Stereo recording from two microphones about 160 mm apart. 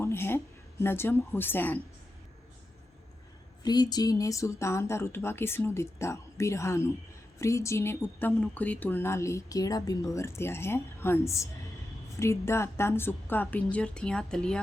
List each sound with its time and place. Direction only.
0.0 s speech: 15° left (ahead or behind)
3.6 s speech: 25° left (ahead or behind); by 14.6 s 5° left (ahead or behind)